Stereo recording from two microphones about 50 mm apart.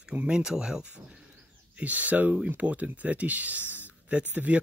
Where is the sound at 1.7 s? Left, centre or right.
Right.